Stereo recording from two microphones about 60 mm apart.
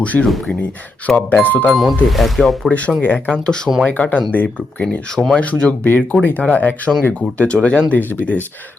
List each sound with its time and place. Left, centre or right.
0.0 s speech: left
1.7 s speech: centre
2.6 s speech: left
5.1 s speech: centre
5.4 s speech: left
5.8 s speech: left